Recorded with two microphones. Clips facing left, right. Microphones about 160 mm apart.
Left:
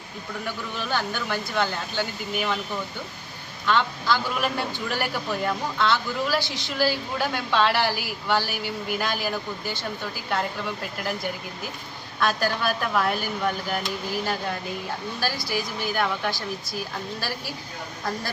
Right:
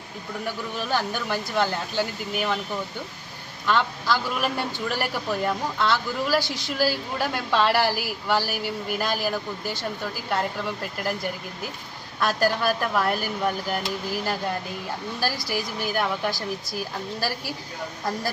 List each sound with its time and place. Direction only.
0.4 s a woman's voice: 5° right (ahead or behind)
3.7 s a woman's voice: 5° right (ahead or behind)
12.2 s a woman's voice: 5° right (ahead or behind)
15.2 s a woman's voice: 40° right (ahead or behind)
15.5 s a woman's voice: 5° right (ahead or behind)